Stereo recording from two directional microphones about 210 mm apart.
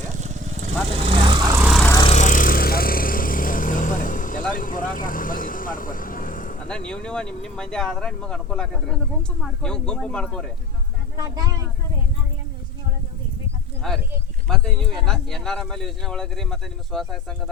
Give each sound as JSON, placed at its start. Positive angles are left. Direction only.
{"t": 0.0, "sound": "lawn mower", "side_deg": -35}
{"t": 0.9, "sound": "vehicle", "side_deg": -25}
{"t": 1.5, "sound": "vehicle", "side_deg": -15}
{"t": 1.7, "sound": "vehicle", "side_deg": 5}
{"t": 2.0, "sound": "vehicle", "side_deg": 30}
{"t": 6.7, "sound": "speech", "side_deg": 5}
{"t": 11.2, "sound": "speech", "side_deg": -20}
{"t": 13.8, "sound": "speech", "side_deg": 0}